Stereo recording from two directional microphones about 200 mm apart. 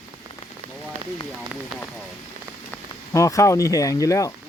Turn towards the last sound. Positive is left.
turn(degrees=15)  # may be behind; listen again after turning